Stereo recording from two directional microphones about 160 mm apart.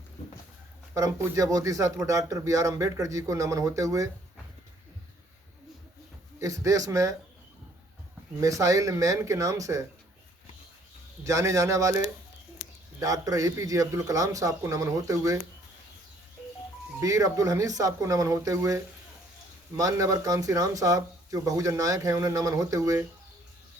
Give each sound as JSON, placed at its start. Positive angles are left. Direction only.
{"t": 0.9, "sound": "speech", "side_deg": -20}
{"t": 6.4, "sound": "speech", "side_deg": -20}
{"t": 8.4, "sound": "speech", "side_deg": -20}
{"t": 11.2, "sound": "speech", "side_deg": -20}
{"t": 12.6, "sound": "a sound", "side_deg": 70}
{"t": 13.0, "sound": "speech", "side_deg": -20}
{"t": 17.0, "sound": "speech", "side_deg": -20}